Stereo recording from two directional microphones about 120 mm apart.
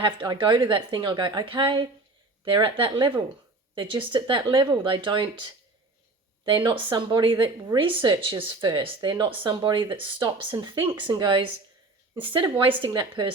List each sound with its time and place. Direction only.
0.0 s speech: 40° right (ahead or behind)